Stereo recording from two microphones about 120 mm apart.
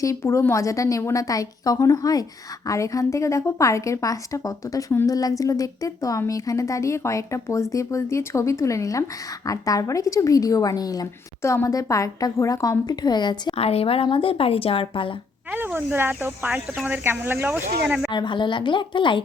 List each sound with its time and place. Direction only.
0.0 s a woman's voice: 25° left (ahead or behind)
13.5 s a woman's voice: 60° left (ahead or behind)
15.5 s speech: 15° right (ahead or behind)
18.1 s a woman's voice: 40° left (ahead or behind)